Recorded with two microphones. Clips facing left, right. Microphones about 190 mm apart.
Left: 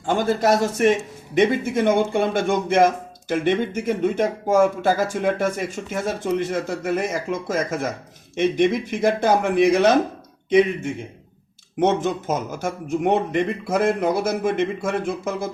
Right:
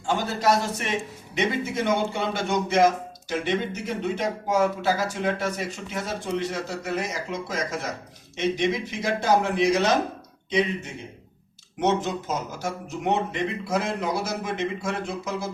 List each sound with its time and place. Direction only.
0.0 s speech: 50° left (ahead or behind)
11.8 s speech: 55° left (ahead or behind)